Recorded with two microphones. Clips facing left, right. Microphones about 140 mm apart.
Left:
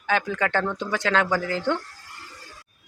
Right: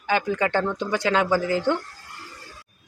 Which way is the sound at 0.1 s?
5° right (ahead or behind).